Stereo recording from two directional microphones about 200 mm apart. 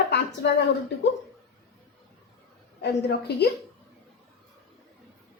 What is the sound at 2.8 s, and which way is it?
Speech, 55° left (ahead or behind).